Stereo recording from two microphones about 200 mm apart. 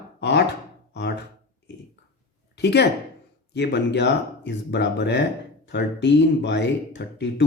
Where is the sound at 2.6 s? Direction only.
55° left (ahead or behind).